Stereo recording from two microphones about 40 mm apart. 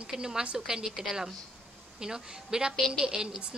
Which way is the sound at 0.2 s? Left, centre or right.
Right.